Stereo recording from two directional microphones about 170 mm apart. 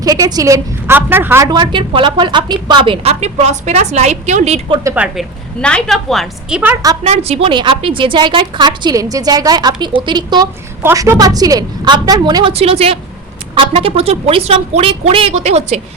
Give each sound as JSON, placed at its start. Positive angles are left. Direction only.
{"t": 0.0, "sound": "a woman's voice", "side_deg": -20}
{"t": 1.5, "sound": "speech", "side_deg": -25}
{"t": 4.8, "sound": "a woman's voice", "side_deg": -15}
{"t": 5.1, "sound": "a woman's voice", "side_deg": 5}
{"t": 7.0, "sound": "a woman's voice", "side_deg": -40}